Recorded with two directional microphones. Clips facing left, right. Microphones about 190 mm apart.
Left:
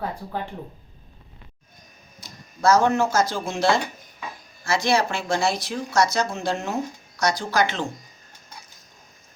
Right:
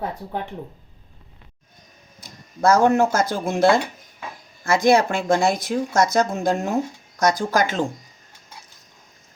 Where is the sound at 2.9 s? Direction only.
55° right (ahead or behind).